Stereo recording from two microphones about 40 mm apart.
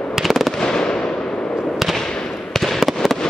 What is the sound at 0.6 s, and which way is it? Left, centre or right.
Fireworks, centre.